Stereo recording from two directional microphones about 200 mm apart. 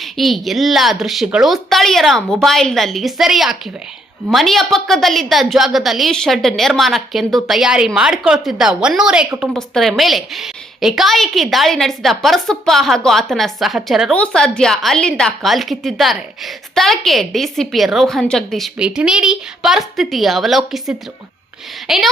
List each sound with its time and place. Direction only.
0.0 s a woman's voice: centre (ahead or behind)